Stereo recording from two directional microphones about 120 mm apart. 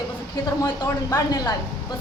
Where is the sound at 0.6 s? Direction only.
25° left (ahead or behind).